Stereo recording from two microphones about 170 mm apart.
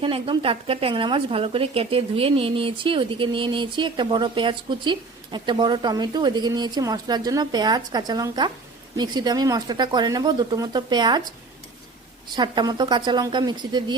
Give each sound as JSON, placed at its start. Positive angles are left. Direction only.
{"t": 0.0, "sound": "a woman's voice", "side_deg": -30}